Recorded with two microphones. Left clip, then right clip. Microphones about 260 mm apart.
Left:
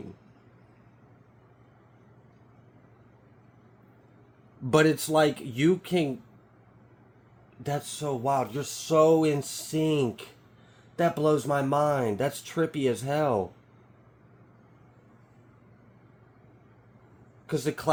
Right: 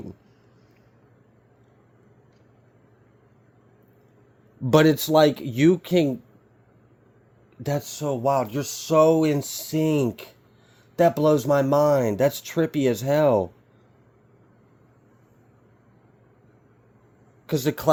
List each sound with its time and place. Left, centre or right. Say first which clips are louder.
4.6 s speech: right 5 dB; right
7.6 s speech: right 4 dB; right
17.4 s speech: right 6 dB; right